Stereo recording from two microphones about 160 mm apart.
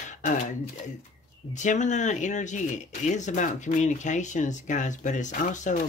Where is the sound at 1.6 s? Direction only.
50° left (ahead or behind).